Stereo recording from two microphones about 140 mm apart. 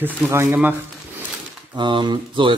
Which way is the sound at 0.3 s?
15° right (ahead or behind).